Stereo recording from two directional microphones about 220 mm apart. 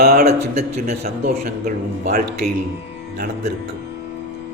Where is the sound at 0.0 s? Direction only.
45° right (ahead or behind).